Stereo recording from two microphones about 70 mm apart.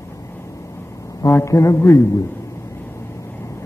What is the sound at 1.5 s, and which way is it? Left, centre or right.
Speech, left.